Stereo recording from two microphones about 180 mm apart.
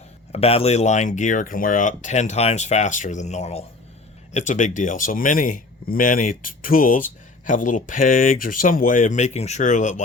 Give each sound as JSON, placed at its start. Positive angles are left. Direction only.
{"t": 0.3, "sound": "speech", "side_deg": 35}